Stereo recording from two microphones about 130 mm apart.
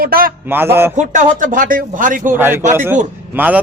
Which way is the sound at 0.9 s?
75° right (ahead or behind).